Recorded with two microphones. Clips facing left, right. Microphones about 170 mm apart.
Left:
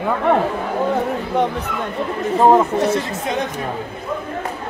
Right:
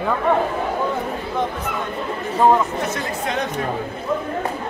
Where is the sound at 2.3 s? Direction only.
20° left (ahead or behind).